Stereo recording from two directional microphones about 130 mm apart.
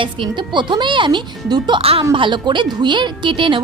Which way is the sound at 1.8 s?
50° right (ahead or behind).